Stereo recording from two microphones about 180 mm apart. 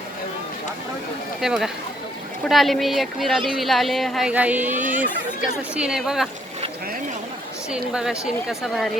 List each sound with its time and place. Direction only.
1.4 s speech: 5° right (ahead or behind)
4.7 s speech: 45° right (ahead or behind)
5.7 s speech: 5° right (ahead or behind)
7.7 s speech: 5° right (ahead or behind)